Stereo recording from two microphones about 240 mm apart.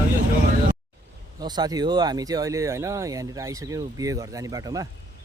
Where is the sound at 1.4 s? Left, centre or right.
Centre.